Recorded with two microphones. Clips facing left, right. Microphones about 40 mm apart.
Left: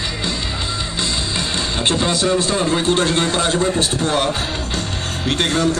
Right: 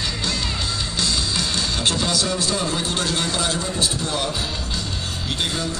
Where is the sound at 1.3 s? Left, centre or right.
Left.